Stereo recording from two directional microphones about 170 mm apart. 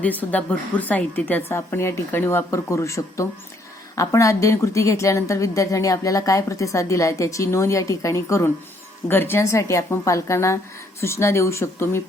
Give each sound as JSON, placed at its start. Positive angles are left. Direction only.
{"t": 0.0, "sound": "a woman's voice", "side_deg": 10}